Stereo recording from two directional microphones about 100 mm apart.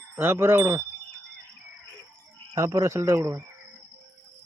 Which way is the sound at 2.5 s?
35° right (ahead or behind).